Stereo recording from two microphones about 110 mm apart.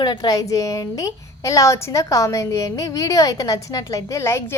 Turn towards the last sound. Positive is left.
turn(degrees=25)  # may be behind; listen again after turning